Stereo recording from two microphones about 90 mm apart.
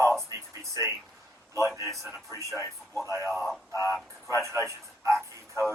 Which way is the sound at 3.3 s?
Centre (ahead or behind).